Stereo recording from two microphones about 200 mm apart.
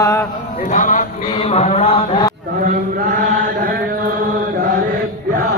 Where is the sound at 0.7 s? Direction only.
40° left (ahead or behind).